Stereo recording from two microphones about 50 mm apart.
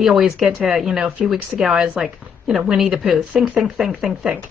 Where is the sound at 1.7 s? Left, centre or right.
Centre.